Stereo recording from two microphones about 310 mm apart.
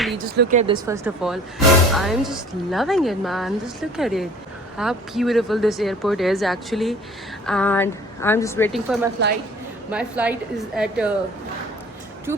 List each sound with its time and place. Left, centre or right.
0.4 s speech: right
0.7 s a woman's voice: centre
12.3 s speech: centre